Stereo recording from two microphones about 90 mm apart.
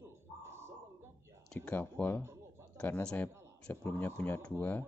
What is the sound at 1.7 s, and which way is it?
Speech, 20° left (ahead or behind).